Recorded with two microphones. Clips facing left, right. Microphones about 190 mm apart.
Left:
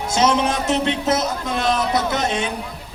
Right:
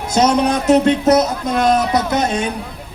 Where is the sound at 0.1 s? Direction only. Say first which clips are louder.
Right 4 dB; 40° right (ahead or behind).